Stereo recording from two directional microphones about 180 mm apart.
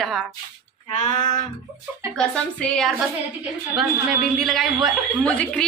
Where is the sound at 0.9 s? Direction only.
40° left (ahead or behind).